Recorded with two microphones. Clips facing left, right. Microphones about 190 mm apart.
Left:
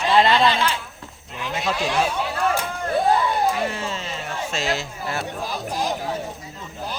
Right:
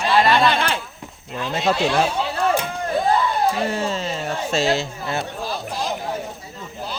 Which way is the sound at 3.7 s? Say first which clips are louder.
Right 5 dB; 35° right (ahead or behind).